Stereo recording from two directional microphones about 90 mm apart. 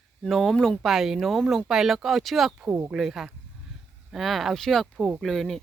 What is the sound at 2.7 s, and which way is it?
Speech, 15° right (ahead or behind).